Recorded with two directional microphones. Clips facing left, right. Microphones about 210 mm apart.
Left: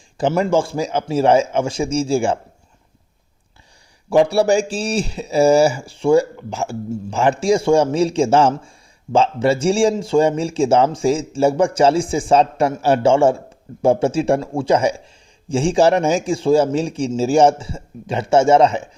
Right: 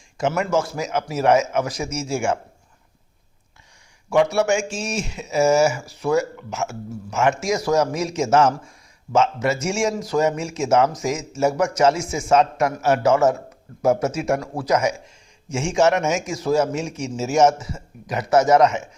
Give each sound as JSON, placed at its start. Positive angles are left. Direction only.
{"t": 0.2, "sound": "a man's voice", "side_deg": 30}
{"t": 4.1, "sound": "a man's voice", "side_deg": 30}